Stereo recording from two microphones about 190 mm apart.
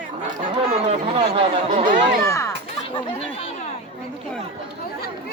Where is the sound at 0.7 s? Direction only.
35° right (ahead or behind).